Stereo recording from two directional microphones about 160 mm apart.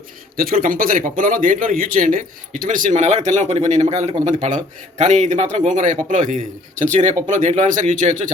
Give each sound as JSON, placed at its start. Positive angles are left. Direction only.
{"t": 0.3, "sound": "speech", "side_deg": -65}